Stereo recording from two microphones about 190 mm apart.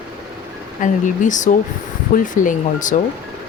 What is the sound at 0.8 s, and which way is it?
Speech, 40° left (ahead or behind).